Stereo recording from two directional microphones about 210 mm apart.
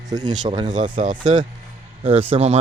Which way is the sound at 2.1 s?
25° right (ahead or behind).